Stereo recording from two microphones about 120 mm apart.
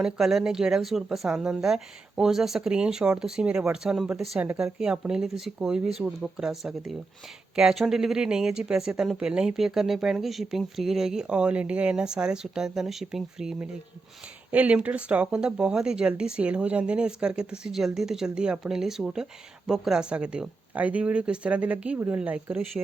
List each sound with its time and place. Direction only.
0.0 s speech: centre (ahead or behind)